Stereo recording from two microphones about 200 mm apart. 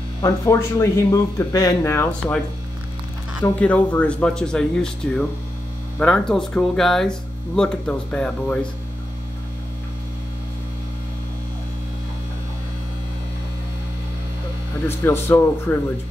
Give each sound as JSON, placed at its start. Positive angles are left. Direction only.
{"t": 0.2, "sound": "speech", "side_deg": 10}
{"t": 3.4, "sound": "speech", "side_deg": 10}
{"t": 15.0, "sound": "speech", "side_deg": 10}